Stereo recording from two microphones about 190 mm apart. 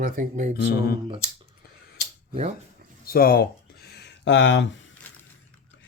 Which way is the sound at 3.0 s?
50° left (ahead or behind).